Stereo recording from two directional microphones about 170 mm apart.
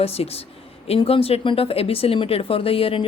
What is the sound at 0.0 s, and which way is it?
Speech, 35° left (ahead or behind).